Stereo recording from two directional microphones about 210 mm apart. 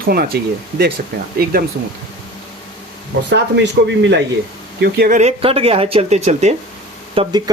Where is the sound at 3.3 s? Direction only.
55° right (ahead or behind).